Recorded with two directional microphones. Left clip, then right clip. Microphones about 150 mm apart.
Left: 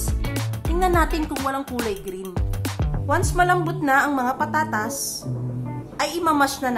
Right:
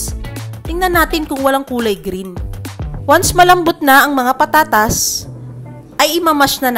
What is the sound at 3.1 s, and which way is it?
A woman's voice, 45° right (ahead or behind).